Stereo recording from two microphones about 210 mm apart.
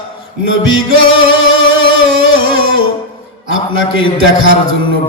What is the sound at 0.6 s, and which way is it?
Music, 70° left (ahead or behind).